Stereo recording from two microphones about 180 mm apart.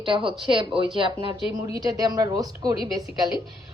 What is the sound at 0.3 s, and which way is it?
Speech, 30° right (ahead or behind).